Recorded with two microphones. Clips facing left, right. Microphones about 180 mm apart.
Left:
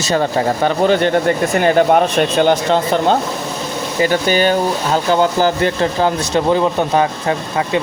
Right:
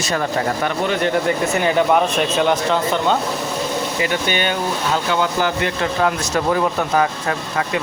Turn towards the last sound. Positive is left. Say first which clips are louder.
# left 4 dB
turn(degrees=25)  # may be behind; listen again after turning